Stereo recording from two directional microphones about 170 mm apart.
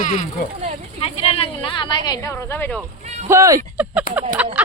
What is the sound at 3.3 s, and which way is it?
Speech, 20° right (ahead or behind).